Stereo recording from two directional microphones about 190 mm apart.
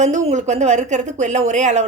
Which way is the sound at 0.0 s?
40° right (ahead or behind).